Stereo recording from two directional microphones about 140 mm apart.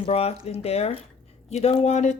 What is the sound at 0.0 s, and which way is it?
Speech, 45° left (ahead or behind).